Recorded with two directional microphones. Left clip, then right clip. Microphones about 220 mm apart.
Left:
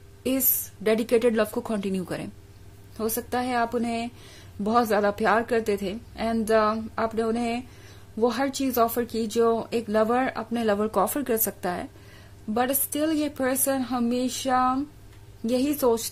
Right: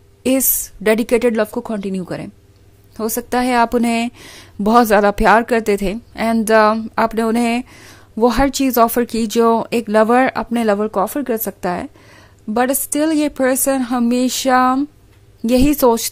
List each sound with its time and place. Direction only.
0.2 s a woman's voice: 35° right (ahead or behind)